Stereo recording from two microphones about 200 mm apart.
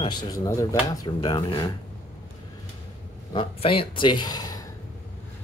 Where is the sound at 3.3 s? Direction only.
25° left (ahead or behind).